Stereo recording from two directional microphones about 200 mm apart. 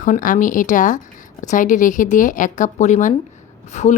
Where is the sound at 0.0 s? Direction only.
40° left (ahead or behind).